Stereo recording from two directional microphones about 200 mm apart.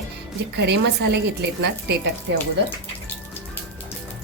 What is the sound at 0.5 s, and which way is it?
Speech, 55° right (ahead or behind).